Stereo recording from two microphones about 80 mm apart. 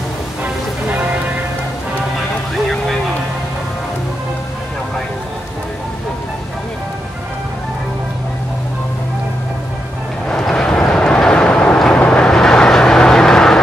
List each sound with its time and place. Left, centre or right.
0.8 s church bell: right
2.5 s vehicle: centre
10.2 s vehicle: centre